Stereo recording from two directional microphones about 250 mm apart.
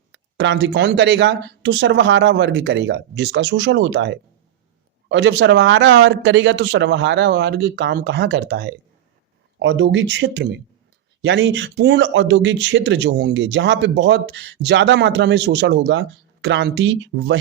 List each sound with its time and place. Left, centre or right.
0.1 s speech: right